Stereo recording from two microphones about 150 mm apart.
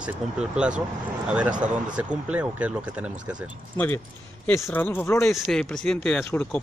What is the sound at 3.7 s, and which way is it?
Speech, 15° left (ahead or behind).